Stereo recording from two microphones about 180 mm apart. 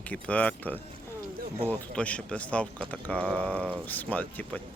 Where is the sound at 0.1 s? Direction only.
5° left (ahead or behind).